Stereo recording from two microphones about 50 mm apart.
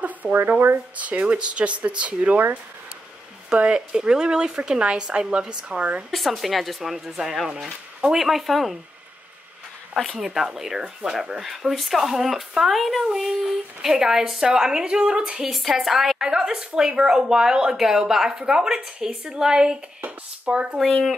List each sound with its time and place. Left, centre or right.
0.0 s a sound: right
0.9 s speech: right
3.4 s speech: right
6.1 s speech: centre
10.1 s speech: centre
20.0 s a sound: right